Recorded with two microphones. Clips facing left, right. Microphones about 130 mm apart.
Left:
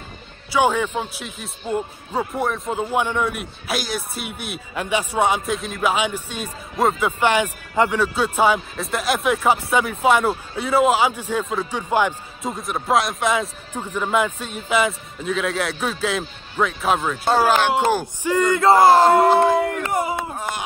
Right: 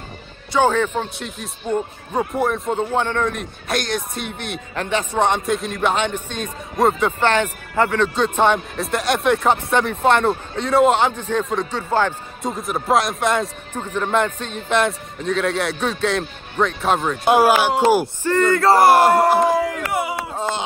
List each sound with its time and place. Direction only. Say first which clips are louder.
0.5 s speech: right 2 dB; 10° left (ahead or behind)
12.4 s speech: right 2 dB; centre (ahead or behind)
17.2 s speech: right 4 dB; 10° right (ahead or behind)
18.2 s speech: left 2 dB; 10° left (ahead or behind)
18.9 s speech: even; 10° right (ahead or behind)
19.9 s speech: left 1 dB; 40° left (ahead or behind)
20.3 s a sound: right 4 dB; 25° right (ahead or behind)